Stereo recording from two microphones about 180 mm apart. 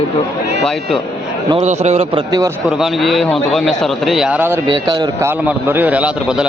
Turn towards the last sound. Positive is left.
turn(degrees=-5)  # may be behind; listen again after turning